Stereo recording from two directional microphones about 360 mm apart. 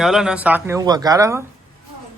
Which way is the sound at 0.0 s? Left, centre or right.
Centre.